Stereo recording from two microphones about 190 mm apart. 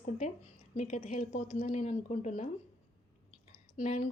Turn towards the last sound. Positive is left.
turn(degrees=35)  # may be behind; listen again after turning